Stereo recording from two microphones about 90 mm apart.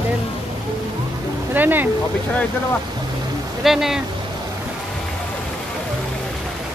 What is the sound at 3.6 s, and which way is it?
Speech, 5° right (ahead or behind).